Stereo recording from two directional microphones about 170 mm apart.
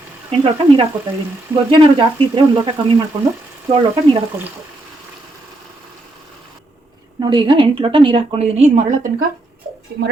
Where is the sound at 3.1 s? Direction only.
30° right (ahead or behind).